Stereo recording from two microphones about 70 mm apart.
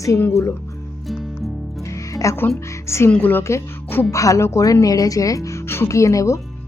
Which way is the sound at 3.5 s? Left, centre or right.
Left.